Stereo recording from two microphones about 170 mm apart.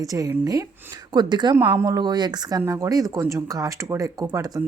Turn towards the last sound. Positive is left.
turn(degrees=-20)  # may be behind; listen again after turning